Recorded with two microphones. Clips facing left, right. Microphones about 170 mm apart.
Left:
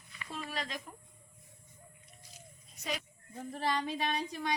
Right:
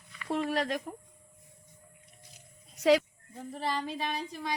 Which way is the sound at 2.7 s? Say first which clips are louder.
Right 16 dB; 90° right.